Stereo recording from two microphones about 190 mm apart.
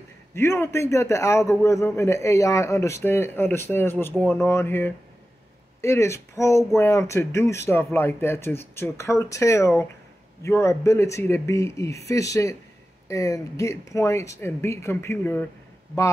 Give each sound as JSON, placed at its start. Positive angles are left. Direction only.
{"t": 0.3, "sound": "a man's voice", "side_deg": 15}